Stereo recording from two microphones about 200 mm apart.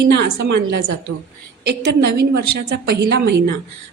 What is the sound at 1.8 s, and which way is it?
A woman's voice, 55° right (ahead or behind).